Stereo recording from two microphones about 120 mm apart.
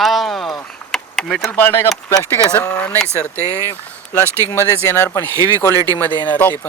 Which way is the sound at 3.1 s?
20° right (ahead or behind).